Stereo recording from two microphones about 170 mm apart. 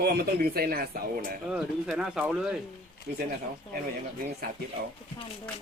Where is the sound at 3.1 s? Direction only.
60° right (ahead or behind).